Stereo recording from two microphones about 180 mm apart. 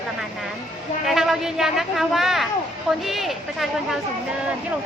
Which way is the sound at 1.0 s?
Centre (ahead or behind).